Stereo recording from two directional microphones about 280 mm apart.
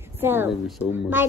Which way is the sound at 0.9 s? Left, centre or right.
Centre.